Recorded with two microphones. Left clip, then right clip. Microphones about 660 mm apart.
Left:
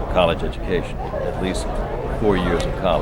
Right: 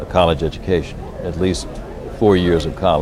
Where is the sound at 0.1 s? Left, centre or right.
Right.